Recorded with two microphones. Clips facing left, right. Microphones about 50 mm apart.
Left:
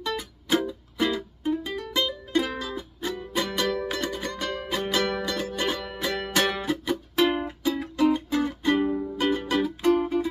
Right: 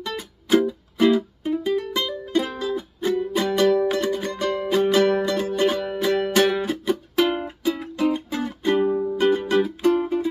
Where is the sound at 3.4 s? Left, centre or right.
Centre.